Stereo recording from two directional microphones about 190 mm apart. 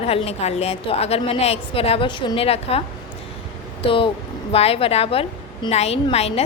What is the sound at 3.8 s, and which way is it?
A woman's voice, 30° left (ahead or behind).